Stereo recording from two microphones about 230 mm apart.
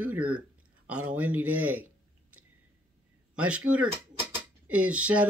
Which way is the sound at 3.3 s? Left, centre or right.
Centre.